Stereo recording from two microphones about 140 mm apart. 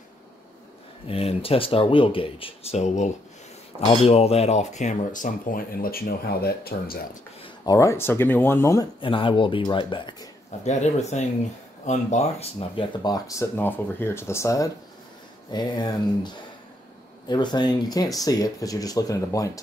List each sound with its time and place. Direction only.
1.0 s speech: 40° left (ahead or behind); by 7.0 s 90° left
7.6 s speech: 20° left (ahead or behind)
9.0 s speech: 35° left (ahead or behind)
10.6 s speech: 55° left (ahead or behind); by 19.6 s 25° left (ahead or behind)